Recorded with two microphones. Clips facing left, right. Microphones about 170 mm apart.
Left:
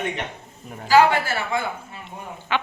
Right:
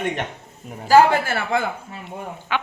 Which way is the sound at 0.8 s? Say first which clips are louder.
Right 2 dB; 50° right (ahead or behind).